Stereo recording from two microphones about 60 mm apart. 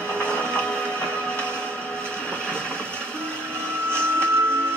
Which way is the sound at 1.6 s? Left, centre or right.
Centre.